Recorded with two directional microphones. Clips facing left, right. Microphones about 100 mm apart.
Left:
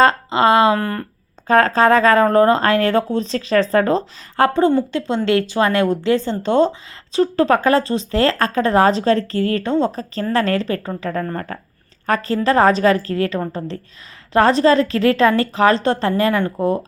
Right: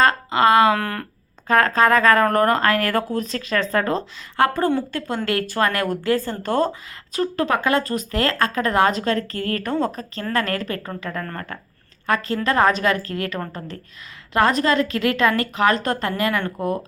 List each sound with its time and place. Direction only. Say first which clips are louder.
0.0 s wail: left 3 dB; 25° left (ahead or behind)
0.8 s speech: left 4 dB; 5° left (ahead or behind)
1.5 s speech: left 3 dB; 30° left (ahead or behind)